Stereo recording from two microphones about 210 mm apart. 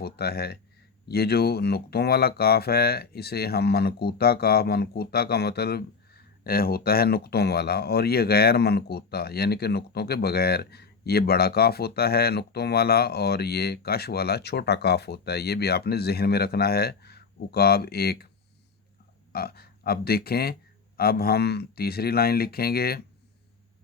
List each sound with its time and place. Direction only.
0.0 s speech: 50° left (ahead or behind)
19.3 s speech: 45° left (ahead or behind)